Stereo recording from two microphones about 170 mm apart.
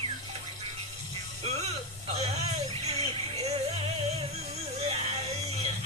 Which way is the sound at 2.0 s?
40° right (ahead or behind).